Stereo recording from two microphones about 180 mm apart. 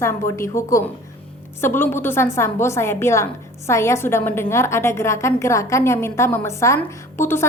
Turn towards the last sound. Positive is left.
turn(degrees=15)  # may be behind; listen again after turning